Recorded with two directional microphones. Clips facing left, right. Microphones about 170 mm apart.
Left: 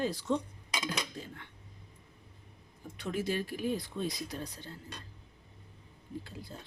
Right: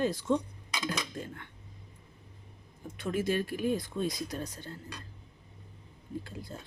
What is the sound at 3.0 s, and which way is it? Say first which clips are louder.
Speech: right 3 dB; 50° right (ahead or behind).